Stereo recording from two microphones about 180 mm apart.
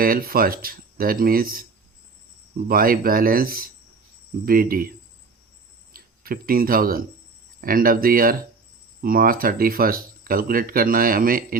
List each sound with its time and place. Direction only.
0.0 s speech: 55° right (ahead or behind)
2.6 s speech: 55° right (ahead or behind)
5.9 s speech: 55° right (ahead or behind)